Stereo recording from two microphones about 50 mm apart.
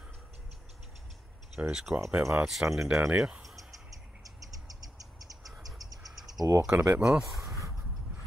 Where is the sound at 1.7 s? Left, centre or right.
Centre.